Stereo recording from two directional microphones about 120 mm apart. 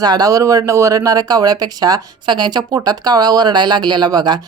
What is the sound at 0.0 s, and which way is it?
Speech, 35° right (ahead or behind).